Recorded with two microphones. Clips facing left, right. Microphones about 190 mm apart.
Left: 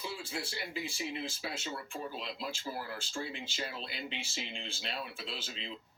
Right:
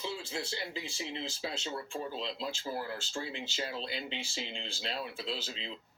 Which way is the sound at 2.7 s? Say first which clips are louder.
Right 4 dB; 10° right (ahead or behind).